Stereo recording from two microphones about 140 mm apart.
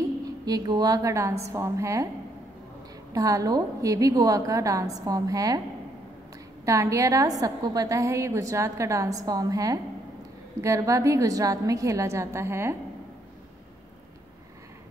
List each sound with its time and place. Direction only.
0.5 s a woman's voice: 30° right (ahead or behind)
3.1 s a woman's voice: 25° right (ahead or behind)
6.6 s a woman's voice: 20° right (ahead or behind)